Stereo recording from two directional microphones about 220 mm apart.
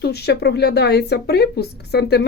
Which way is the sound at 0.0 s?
45° left (ahead or behind).